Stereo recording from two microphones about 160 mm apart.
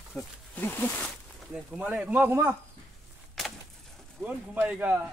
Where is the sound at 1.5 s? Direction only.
10° right (ahead or behind).